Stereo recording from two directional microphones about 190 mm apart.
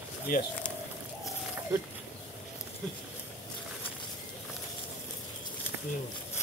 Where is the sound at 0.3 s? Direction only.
50° left (ahead or behind).